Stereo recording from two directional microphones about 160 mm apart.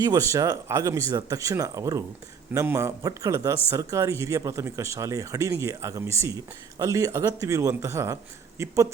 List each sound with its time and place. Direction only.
0.0 s speech: 20° right (ahead or behind)